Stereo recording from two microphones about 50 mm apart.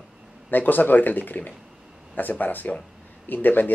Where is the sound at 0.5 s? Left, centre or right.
Left.